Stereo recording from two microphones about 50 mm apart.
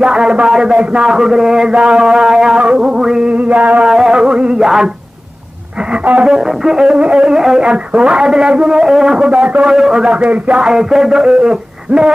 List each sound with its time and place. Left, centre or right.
0.0 s speech: centre
3.3 s a man's voice: right
3.8 s speech: centre
6.2 s speech: centre
7.6 s a man's voice: right
9.8 s a man's voice: centre
10.6 s speech: centre